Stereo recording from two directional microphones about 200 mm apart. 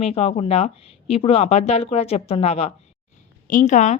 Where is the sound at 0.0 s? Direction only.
30° left (ahead or behind).